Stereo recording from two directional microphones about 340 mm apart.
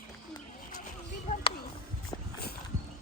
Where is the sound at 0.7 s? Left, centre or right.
Left.